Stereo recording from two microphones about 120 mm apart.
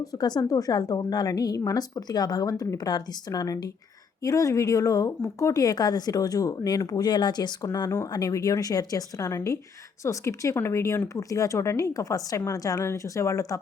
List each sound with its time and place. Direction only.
0.0 s a woman's voice: 30° left (ahead or behind)